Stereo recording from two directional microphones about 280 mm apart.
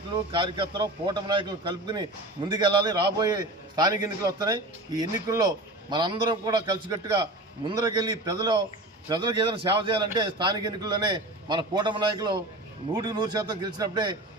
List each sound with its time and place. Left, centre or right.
0.3 s a man's voice: centre